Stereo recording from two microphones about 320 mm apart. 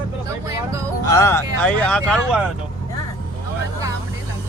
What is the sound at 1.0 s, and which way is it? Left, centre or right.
Speech, centre.